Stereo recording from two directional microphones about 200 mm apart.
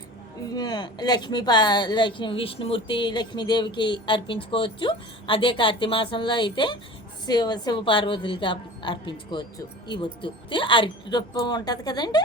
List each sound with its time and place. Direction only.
0.5 s speech: 20° left (ahead or behind)